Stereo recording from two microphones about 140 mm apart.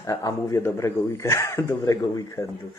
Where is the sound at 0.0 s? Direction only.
25° left (ahead or behind).